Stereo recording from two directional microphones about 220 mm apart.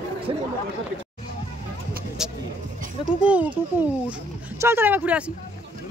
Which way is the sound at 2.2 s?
5° right (ahead or behind).